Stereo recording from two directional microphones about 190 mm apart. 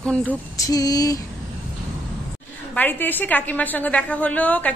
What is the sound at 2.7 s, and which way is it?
A woman's voice, 10° left (ahead or behind).